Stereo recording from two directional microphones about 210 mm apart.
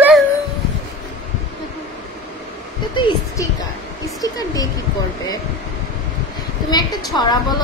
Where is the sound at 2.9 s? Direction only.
15° left (ahead or behind).